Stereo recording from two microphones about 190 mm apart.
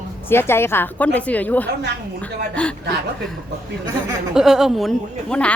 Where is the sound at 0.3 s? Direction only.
10° left (ahead or behind).